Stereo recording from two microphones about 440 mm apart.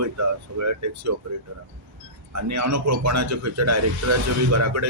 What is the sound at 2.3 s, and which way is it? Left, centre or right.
Speech, right.